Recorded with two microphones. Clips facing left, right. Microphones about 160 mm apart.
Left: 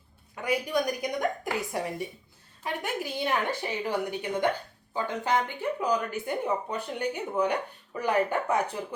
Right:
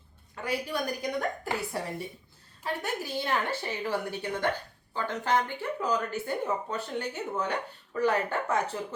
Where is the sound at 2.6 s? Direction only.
15° left (ahead or behind).